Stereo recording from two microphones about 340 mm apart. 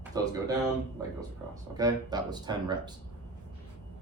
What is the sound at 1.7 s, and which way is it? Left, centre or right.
Speech, centre.